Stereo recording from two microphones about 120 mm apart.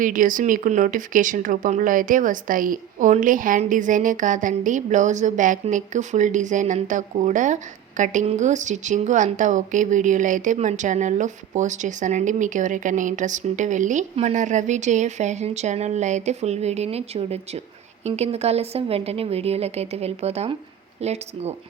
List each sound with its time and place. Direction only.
0.0 s a woman's voice: 90° right; by 21.5 s 65° right (ahead or behind)